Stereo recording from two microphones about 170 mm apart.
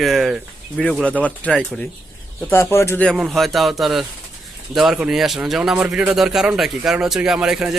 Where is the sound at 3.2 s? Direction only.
Centre (ahead or behind).